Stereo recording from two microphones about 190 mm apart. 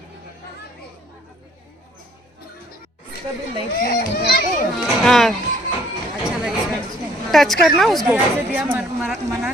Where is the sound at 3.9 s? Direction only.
55° left (ahead or behind).